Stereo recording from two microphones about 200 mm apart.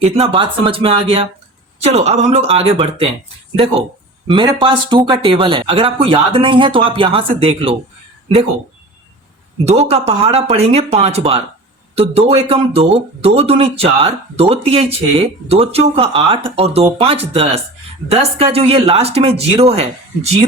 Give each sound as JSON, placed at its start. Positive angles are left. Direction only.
{"t": 0.0, "sound": "speech", "side_deg": -30}
{"t": 4.3, "sound": "speech", "side_deg": -25}
{"t": 9.6, "sound": "speech", "side_deg": -30}